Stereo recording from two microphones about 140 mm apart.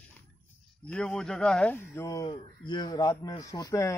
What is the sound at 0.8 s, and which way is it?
Speech, 5° left (ahead or behind).